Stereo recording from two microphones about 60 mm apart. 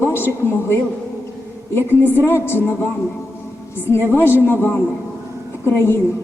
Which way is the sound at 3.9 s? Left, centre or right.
Left.